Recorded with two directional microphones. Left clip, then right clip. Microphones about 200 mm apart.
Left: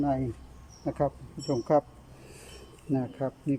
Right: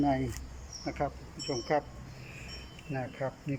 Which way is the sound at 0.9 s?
25° left (ahead or behind).